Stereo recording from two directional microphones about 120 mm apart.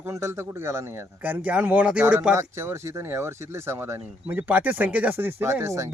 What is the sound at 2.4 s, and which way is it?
A man's voice, 25° right (ahead or behind).